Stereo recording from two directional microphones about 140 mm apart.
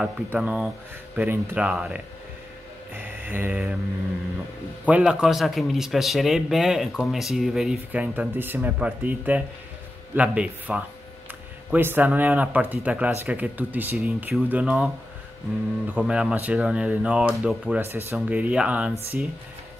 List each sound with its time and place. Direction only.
0.0 s speech: 5° right (ahead or behind)
2.9 s a sound: 15° right (ahead or behind)
4.8 s a man's voice: 10° right (ahead or behind)
15.9 s speech: 5° right (ahead or behind)